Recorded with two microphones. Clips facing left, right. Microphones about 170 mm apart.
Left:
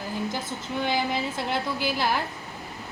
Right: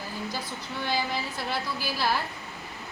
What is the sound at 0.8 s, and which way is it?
A woman's voice, 20° left (ahead or behind).